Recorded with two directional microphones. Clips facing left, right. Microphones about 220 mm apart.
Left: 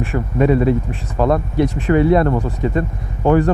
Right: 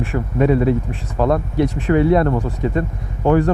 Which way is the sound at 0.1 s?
20° left (ahead or behind).